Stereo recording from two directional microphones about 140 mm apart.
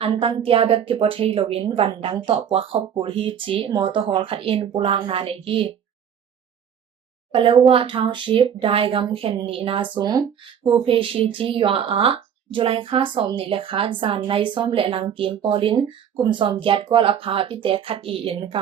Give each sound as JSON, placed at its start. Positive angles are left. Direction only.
{"t": 0.0, "sound": "a woman's voice", "side_deg": -40}
{"t": 7.3, "sound": "speech", "side_deg": -40}